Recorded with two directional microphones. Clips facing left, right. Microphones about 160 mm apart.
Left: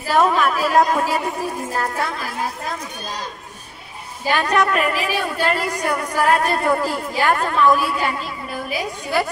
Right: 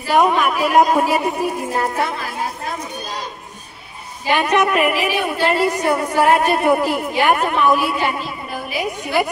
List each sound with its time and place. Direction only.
0.1 s a woman's voice: 15° right (ahead or behind)
4.3 s a woman's voice: 20° right (ahead or behind)